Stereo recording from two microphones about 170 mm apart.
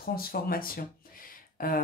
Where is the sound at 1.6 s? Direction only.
55° left (ahead or behind).